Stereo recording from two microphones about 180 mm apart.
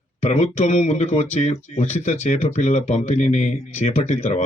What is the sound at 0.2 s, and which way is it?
Speech, 40° left (ahead or behind).